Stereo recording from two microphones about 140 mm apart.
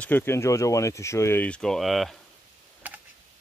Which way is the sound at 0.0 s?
15° left (ahead or behind).